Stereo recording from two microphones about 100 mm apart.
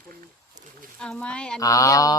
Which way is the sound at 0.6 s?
45° right (ahead or behind).